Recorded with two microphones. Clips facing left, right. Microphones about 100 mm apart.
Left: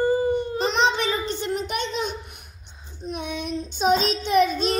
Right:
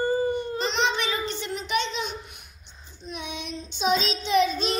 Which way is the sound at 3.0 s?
45° left (ahead or behind).